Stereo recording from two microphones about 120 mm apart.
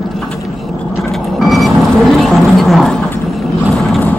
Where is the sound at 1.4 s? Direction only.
Centre (ahead or behind).